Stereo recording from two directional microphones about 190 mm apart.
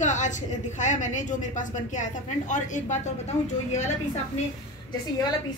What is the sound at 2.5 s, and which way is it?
Speech, 40° left (ahead or behind).